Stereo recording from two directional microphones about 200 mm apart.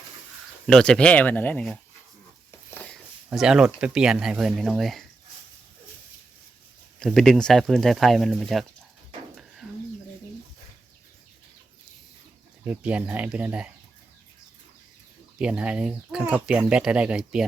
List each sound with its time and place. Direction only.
0.7 s speech: 5° left (ahead or behind)
2.5 s a sound: 10° left (ahead or behind)
3.2 s speech: 5° right (ahead or behind)
7.0 s speech: centre (ahead or behind)
9.3 s bird: centre (ahead or behind)
12.6 s speech: 5° right (ahead or behind)
15.4 s speech: 5° right (ahead or behind)